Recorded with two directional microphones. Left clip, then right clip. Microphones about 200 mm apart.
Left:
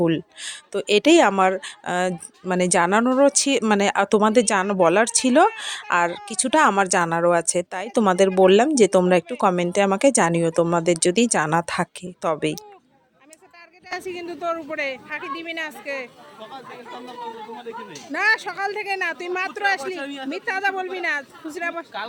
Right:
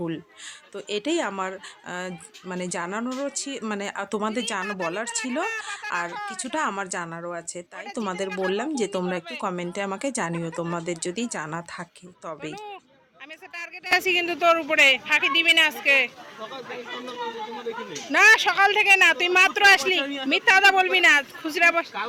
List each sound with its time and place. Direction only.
0.0 s speech: 40° left (ahead or behind)
13.8 s speech: centre (ahead or behind)
18.1 s speech: 5° left (ahead or behind)